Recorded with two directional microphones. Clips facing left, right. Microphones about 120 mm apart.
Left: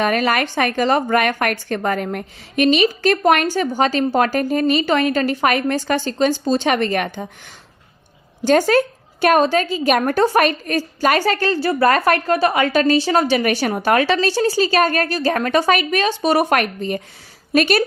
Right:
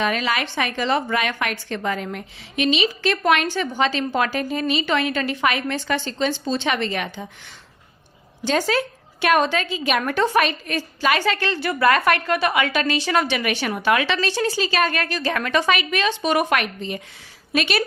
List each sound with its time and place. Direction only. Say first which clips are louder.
0.0 s a woman's voice: left 5 dB; 50° left (ahead or behind)
8.4 s a woman's voice: left 7 dB; 50° left (ahead or behind)